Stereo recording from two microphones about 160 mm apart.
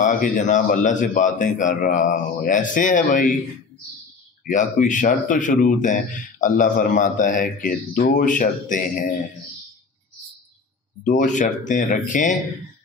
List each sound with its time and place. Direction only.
0.0 s speech: 50° left (ahead or behind)
4.5 s speech: 55° left (ahead or behind)
11.1 s speech: 50° left (ahead or behind)